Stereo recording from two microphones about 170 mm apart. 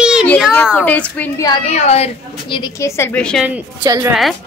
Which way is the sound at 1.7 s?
40° left (ahead or behind).